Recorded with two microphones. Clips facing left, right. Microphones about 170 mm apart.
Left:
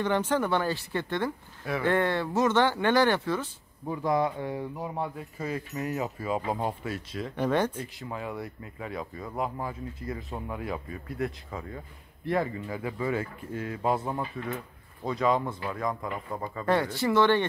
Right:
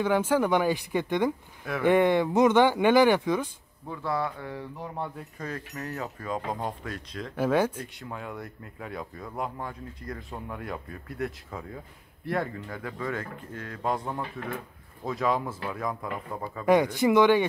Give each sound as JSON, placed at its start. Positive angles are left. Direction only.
{"t": 0.0, "sound": "speech", "side_deg": -10}
{"t": 3.8, "sound": "speech", "side_deg": 15}
{"t": 4.7, "sound": "speech", "side_deg": 5}
{"t": 16.6, "sound": "speech", "side_deg": -15}